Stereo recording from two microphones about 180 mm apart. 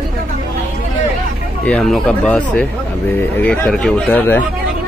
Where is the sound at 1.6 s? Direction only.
5° left (ahead or behind).